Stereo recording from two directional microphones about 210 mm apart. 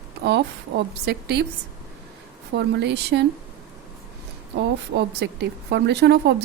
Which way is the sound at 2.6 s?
55° right (ahead or behind).